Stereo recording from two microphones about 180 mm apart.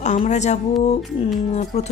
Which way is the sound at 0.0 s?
40° left (ahead or behind).